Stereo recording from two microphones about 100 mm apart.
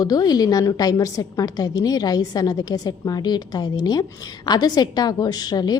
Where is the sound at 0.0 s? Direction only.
40° left (ahead or behind).